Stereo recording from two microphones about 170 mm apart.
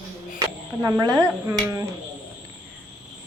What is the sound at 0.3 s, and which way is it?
Speech, 20° right (ahead or behind).